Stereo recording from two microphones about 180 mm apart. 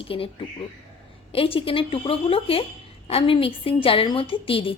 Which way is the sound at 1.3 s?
30° left (ahead or behind).